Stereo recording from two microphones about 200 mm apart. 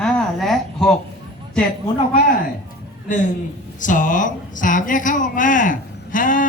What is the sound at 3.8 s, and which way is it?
Speech, 40° left (ahead or behind).